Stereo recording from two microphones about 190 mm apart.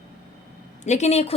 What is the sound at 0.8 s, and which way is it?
Speech, 35° left (ahead or behind).